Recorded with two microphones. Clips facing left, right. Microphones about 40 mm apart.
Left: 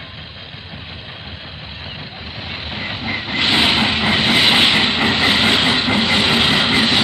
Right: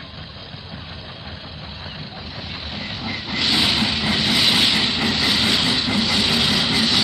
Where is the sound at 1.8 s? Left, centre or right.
Left.